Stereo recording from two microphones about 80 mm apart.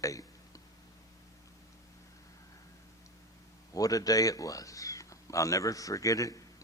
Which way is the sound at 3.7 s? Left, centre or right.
Left.